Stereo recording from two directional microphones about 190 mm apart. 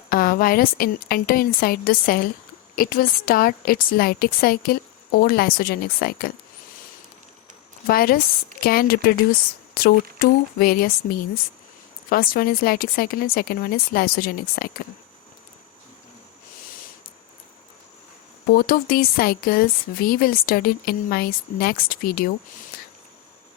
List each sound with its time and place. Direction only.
0.1 s speech: 50° left (ahead or behind)
7.9 s speech: 50° left (ahead or behind)
18.5 s speech: 50° left (ahead or behind)
22.7 s a sound: 50° left (ahead or behind)